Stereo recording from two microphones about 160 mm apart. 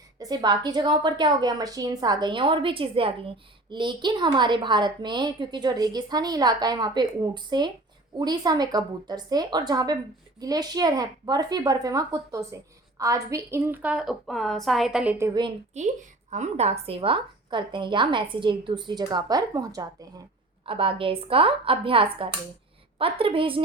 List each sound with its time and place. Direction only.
0.2 s a woman's voice: 25° right (ahead or behind); by 15.1 s 5° right (ahead or behind)
15.8 s a woman's voice: 45° right (ahead or behind); by 20.1 s 20° right (ahead or behind)
20.7 s speech: 35° right (ahead or behind)